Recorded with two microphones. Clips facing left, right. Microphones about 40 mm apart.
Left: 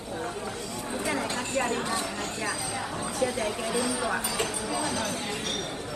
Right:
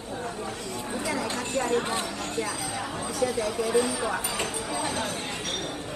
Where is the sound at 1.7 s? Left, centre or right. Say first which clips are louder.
Right 3 dB; right.